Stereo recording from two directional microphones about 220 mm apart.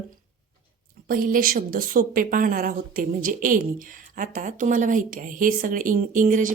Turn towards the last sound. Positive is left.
turn(degrees=-35)  # may be behind; listen again after turning